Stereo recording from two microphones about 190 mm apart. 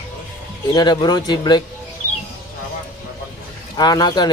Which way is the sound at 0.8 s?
20° left (ahead or behind).